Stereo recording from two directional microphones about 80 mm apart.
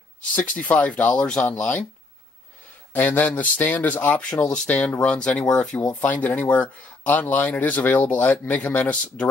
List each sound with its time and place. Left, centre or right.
0.6 s speech: centre
2.9 s a man's voice: left